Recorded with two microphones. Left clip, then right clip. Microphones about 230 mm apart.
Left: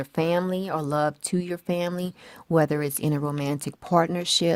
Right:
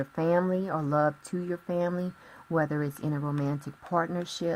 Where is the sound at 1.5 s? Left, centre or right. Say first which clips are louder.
Right 1 dB; left.